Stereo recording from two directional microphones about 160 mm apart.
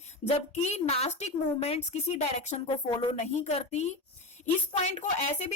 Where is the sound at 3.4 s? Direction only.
45° left (ahead or behind).